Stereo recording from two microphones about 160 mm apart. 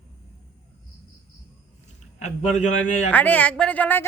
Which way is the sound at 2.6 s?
45° left (ahead or behind).